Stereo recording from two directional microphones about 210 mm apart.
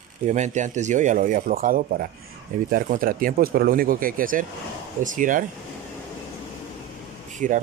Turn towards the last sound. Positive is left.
turn(degrees=-35)  # may be behind; listen again after turning